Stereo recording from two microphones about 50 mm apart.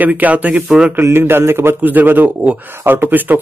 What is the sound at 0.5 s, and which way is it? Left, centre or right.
Speech, centre.